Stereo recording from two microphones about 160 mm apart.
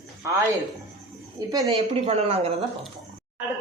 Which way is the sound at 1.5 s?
20° right (ahead or behind).